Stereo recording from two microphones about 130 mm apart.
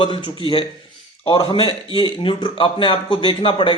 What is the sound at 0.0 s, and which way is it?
A man's voice, 40° left (ahead or behind).